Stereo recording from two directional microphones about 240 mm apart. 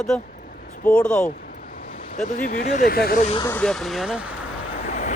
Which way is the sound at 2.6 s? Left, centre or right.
Left.